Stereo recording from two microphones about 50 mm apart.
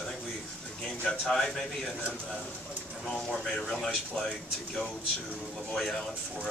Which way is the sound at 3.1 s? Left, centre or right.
Centre.